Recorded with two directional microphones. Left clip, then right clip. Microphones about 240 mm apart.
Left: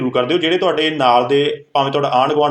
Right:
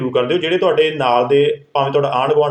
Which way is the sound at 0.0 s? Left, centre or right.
Left.